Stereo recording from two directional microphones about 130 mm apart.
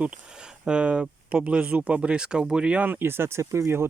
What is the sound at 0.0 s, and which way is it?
Speech, 5° right (ahead or behind).